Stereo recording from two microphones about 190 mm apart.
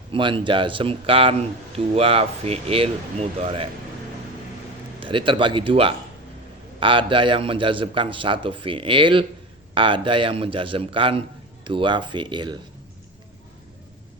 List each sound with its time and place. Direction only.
0.1 s speech: 25° right (ahead or behind)
4.9 s speech: 25° right (ahead or behind)